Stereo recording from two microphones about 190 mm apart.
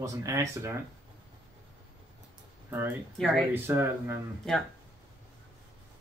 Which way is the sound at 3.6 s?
10° right (ahead or behind).